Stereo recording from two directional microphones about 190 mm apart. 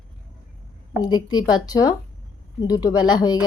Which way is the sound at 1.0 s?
20° left (ahead or behind).